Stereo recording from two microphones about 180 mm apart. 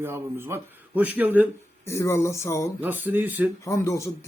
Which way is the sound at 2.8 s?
10° right (ahead or behind).